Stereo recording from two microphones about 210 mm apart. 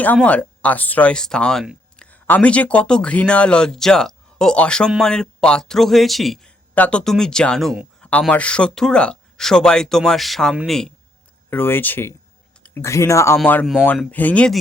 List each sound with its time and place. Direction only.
0.0 s speech: 5° left (ahead or behind)